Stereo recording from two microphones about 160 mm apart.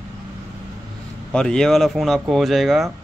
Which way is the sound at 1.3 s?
5° left (ahead or behind).